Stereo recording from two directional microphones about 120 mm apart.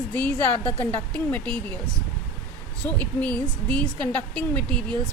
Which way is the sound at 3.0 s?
10° left (ahead or behind).